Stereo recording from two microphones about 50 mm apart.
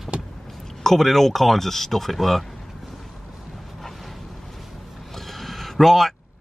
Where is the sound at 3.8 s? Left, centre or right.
Centre.